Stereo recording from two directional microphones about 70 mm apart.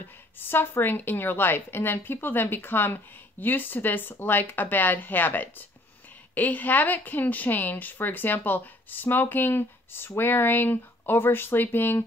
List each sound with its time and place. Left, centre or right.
0.0 s a woman's voice: left